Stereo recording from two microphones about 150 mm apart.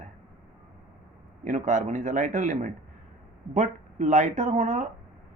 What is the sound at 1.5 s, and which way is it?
Speech, 55° right (ahead or behind).